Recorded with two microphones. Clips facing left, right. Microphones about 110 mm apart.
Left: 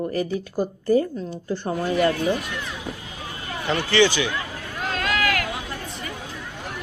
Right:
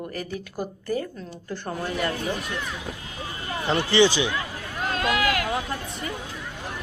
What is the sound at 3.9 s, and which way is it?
Speech, 25° right (ahead or behind).